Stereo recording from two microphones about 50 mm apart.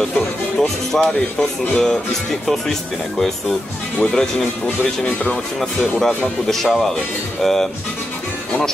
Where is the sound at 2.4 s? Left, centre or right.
Centre.